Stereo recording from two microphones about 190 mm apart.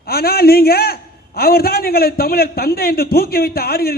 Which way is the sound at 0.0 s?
55° left (ahead or behind).